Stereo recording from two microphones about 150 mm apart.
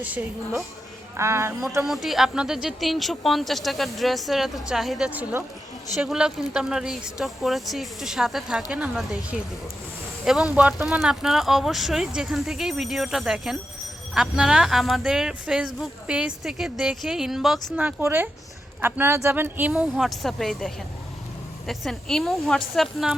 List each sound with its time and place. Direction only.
0.0 s speech: 10° right (ahead or behind)
1.8 s speech: centre (ahead or behind)